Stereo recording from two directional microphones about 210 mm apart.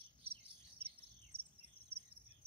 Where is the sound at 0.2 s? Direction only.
25° right (ahead or behind).